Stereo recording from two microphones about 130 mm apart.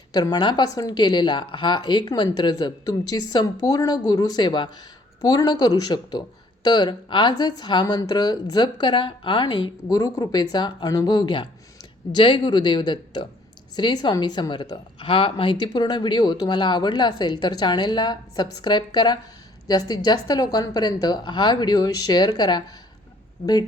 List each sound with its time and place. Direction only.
0.1 s speech: 30° left (ahead or behind)